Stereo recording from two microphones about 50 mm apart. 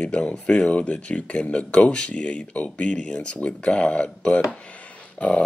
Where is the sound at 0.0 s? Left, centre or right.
Left.